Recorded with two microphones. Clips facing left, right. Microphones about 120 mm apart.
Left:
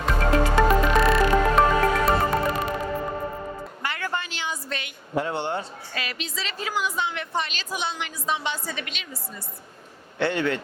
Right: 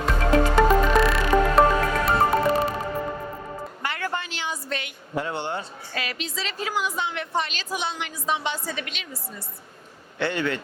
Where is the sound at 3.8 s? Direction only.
35° right (ahead or behind).